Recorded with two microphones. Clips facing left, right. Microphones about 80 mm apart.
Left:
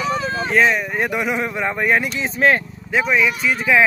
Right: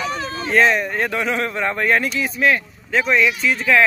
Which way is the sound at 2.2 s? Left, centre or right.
Left.